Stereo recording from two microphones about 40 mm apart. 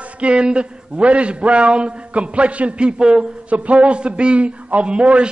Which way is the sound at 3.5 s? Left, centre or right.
Right.